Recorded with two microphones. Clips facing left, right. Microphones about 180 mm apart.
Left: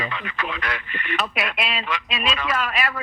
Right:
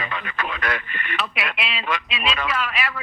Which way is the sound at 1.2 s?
45° left (ahead or behind).